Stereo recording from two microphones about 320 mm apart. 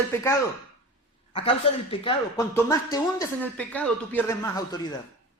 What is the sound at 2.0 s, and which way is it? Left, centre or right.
Speech, centre.